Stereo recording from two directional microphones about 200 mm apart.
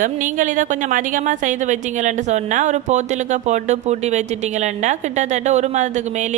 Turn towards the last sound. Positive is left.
turn(degrees=-35)  # may be behind; listen again after turning